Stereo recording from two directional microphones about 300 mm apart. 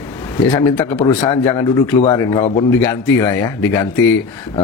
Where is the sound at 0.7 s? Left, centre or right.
Centre.